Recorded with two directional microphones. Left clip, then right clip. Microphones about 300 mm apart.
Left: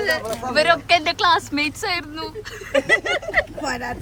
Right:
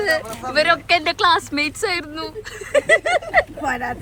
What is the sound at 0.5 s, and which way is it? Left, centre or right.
Speech, centre.